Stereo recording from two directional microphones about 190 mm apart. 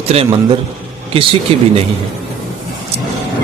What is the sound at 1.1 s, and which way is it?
Speech, 30° right (ahead or behind).